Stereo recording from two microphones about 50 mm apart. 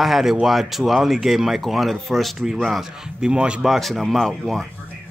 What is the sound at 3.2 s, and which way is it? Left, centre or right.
Speech, centre.